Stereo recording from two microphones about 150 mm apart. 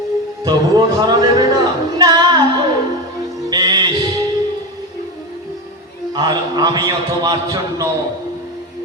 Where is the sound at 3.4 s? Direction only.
30° right (ahead or behind).